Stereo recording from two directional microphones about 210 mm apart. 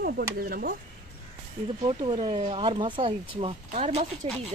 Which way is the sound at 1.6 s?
25° right (ahead or behind).